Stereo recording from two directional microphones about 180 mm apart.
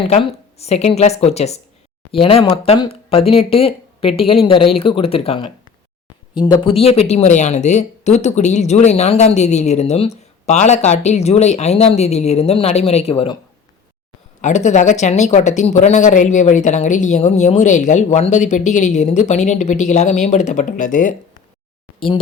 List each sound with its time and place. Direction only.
0.1 s speech: 35° left (ahead or behind)
14.4 s speech: 40° left (ahead or behind)